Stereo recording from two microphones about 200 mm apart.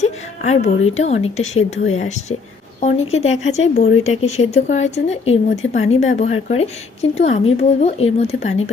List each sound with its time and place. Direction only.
0.0 s a woman's voice: 35° left (ahead or behind)